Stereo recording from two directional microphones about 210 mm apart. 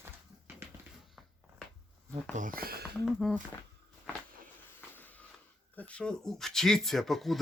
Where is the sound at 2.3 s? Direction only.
40° right (ahead or behind).